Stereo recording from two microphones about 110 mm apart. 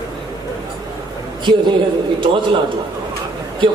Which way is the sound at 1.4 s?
50° right (ahead or behind).